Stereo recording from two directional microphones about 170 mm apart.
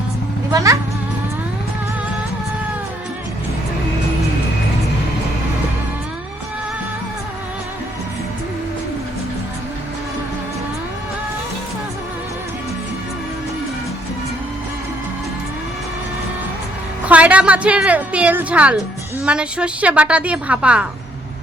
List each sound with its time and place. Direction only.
0.5 s speech: 20° right (ahead or behind)
17.1 s a woman's voice: 10° right (ahead or behind)